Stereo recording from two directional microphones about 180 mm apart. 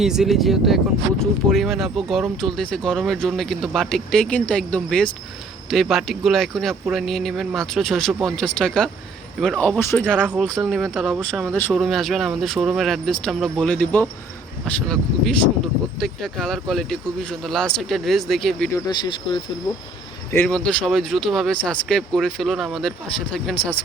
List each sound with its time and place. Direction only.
0.0 s speech: centre (ahead or behind)
10.2 s speech: 5° right (ahead or behind)
11.5 s speech: 10° left (ahead or behind)
18.7 s speech: 25° left (ahead or behind)
20.3 s speech: 10° left (ahead or behind)